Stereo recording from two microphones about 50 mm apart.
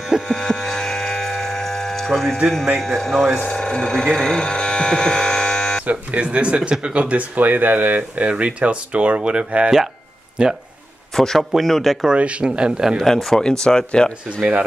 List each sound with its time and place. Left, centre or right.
0.3 s hum: centre
2.8 s speech: centre
3.3 s speech: left
5.9 s speech: right
11.1 s speech: centre
12.2 s speech: right
13.0 s speech: centre